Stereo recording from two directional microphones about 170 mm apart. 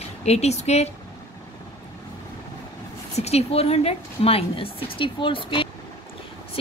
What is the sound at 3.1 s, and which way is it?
Speech, 40° left (ahead or behind).